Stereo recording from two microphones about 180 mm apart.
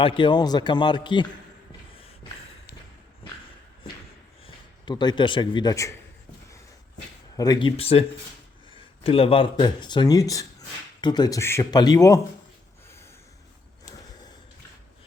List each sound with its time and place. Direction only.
0.0 s a man's voice: 30° left (ahead or behind)
4.4 s a man's voice: 25° left (ahead or behind)
7.3 s a man's voice: 20° left (ahead or behind)
7.8 s a man's voice: 30° left (ahead or behind)